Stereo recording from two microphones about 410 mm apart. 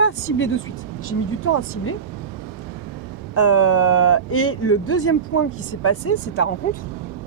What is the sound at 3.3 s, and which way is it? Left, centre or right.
Speech, left.